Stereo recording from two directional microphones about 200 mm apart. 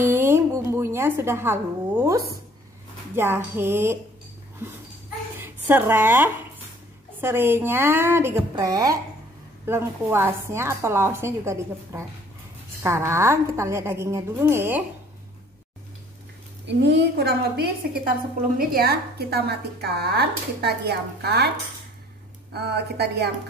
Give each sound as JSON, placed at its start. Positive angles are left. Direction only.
{"t": 0.1, "sound": "music", "side_deg": -15}
{"t": 0.7, "sound": "a woman's voice", "side_deg": -10}
{"t": 5.4, "sound": "a woman's voice", "side_deg": -10}
{"t": 16.6, "sound": "a woman's voice", "side_deg": -60}
{"t": 22.5, "sound": "a woman's voice", "side_deg": -55}